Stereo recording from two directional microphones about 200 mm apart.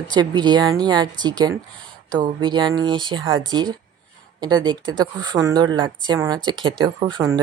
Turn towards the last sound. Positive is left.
turn(degrees=-20)  # may be behind; listen again after turning